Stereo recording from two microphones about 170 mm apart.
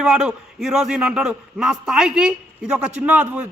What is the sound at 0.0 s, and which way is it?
A man's voice, 5° right (ahead or behind).